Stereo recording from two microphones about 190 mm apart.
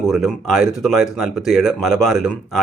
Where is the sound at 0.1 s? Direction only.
Centre (ahead or behind).